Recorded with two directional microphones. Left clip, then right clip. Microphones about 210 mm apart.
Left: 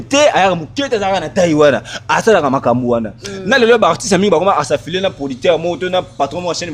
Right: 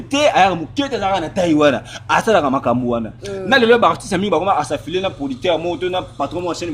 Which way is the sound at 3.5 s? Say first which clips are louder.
Left 2 dB; 50° left (ahead or behind).